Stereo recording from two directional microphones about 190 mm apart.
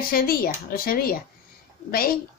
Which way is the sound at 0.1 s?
50° left (ahead or behind).